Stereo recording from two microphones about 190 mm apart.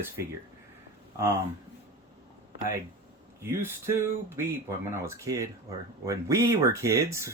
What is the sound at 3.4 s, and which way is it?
Speech, 10° right (ahead or behind).